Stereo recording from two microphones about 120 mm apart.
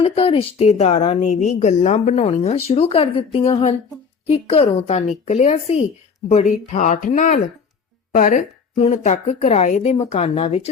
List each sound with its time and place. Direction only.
0.0 s a woman's voice: 55° left (ahead or behind)
4.3 s a woman's voice: 55° left (ahead or behind)